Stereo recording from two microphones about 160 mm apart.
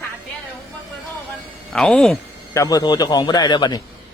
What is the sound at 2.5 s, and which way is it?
A man's voice, 20° left (ahead or behind).